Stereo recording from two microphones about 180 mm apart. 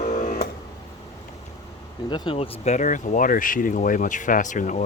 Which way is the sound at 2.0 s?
25° left (ahead or behind).